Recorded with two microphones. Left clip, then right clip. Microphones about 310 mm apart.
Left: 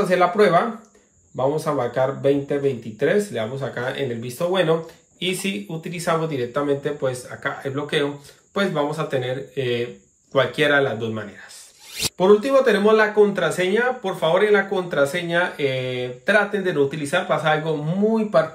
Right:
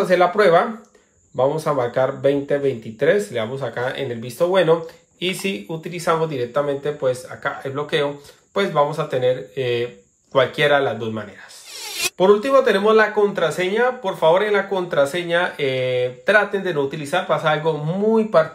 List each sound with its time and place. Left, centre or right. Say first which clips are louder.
0.1 s speech: right 3 dB; right